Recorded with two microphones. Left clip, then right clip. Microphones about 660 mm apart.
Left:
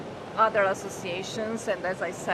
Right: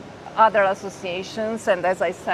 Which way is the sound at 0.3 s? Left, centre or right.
Right.